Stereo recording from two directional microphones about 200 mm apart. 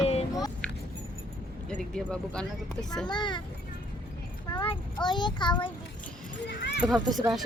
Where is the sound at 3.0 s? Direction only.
20° left (ahead or behind).